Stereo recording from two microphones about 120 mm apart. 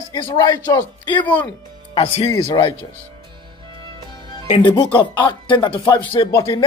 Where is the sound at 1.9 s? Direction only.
55° left (ahead or behind).